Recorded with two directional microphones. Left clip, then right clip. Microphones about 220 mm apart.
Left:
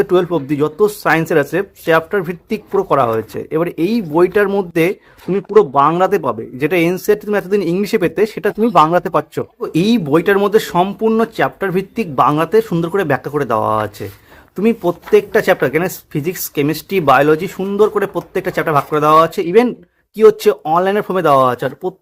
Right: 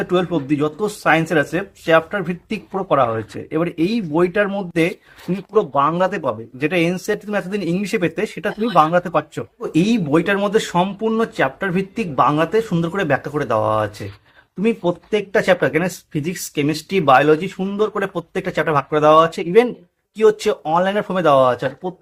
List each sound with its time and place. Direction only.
0.0 s speech: 45° left (ahead or behind)